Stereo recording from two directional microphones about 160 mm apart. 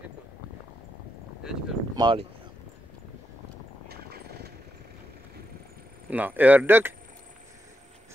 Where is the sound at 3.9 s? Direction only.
90° right.